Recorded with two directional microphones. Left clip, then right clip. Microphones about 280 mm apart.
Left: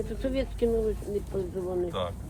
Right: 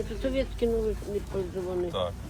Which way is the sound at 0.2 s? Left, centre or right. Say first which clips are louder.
Right 1 dB; centre.